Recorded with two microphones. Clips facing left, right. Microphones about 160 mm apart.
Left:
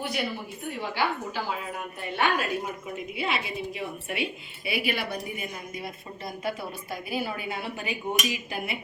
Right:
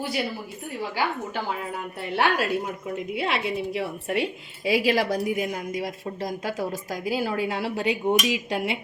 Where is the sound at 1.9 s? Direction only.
70° right (ahead or behind).